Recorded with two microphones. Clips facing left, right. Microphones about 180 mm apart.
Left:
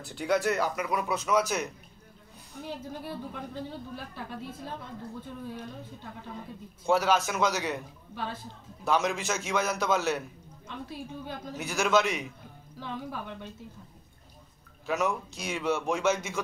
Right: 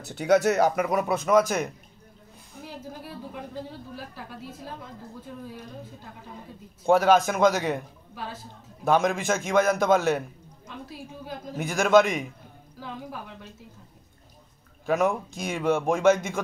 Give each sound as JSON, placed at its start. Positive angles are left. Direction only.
{"t": 0.2, "sound": "speech", "side_deg": -70}
{"t": 0.7, "sound": "a man's voice", "side_deg": -50}
{"t": 2.6, "sound": "speech", "side_deg": -5}
{"t": 6.9, "sound": "a man's voice", "side_deg": -50}
{"t": 8.8, "sound": "a man's voice", "side_deg": -55}
{"t": 11.5, "sound": "a man's voice", "side_deg": -55}
{"t": 12.8, "sound": "speech", "side_deg": -5}
{"t": 14.9, "sound": "a man's voice", "side_deg": -55}